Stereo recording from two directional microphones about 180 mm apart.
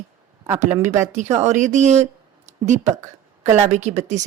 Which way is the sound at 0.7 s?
15° right (ahead or behind).